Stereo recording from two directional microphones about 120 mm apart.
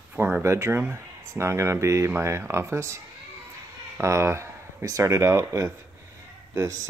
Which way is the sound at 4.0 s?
25° right (ahead or behind).